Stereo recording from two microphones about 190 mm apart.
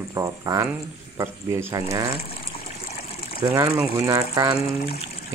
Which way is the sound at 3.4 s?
15° right (ahead or behind).